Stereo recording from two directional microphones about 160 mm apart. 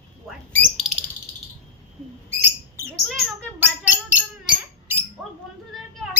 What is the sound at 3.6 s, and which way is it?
Bird, 10° right (ahead or behind).